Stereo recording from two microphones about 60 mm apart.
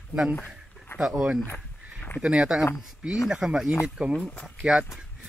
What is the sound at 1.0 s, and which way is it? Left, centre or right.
Speech, centre.